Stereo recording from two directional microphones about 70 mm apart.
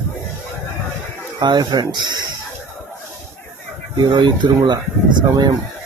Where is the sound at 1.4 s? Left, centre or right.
Right.